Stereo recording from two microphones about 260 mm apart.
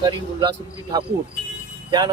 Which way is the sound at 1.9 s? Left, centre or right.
Centre.